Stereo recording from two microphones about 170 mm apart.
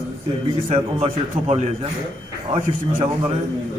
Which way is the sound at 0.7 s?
40° right (ahead or behind).